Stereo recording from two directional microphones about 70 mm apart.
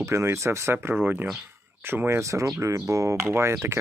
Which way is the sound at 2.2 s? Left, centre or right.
Right.